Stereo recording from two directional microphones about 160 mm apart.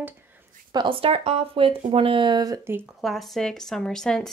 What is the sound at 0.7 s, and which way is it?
Speech, 30° right (ahead or behind).